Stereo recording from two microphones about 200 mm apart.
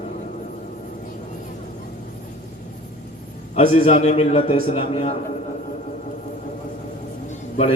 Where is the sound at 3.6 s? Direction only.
30° left (ahead or behind).